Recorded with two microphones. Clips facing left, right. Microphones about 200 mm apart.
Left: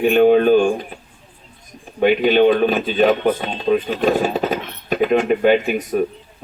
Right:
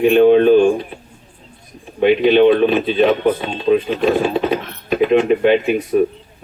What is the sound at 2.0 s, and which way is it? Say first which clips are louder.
Speech: right 3 dB; 40° left (ahead or behind).